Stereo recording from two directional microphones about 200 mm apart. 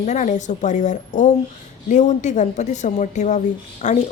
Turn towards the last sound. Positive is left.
turn(degrees=35)  # may be behind; listen again after turning